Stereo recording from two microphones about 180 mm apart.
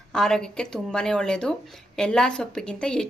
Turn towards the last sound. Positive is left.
turn(degrees=5)  # may be behind; listen again after turning